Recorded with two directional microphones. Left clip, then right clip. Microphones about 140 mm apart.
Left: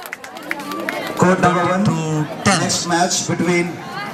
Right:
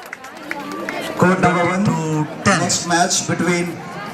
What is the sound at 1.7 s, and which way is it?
Music, 5° left (ahead or behind).